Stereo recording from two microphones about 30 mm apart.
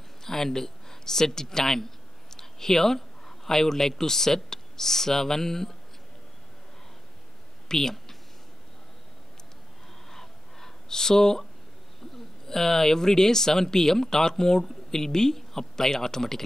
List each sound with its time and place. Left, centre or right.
0.2 s speech: centre
7.6 s speech: centre
10.0 s a sound: centre
12.4 s speech: centre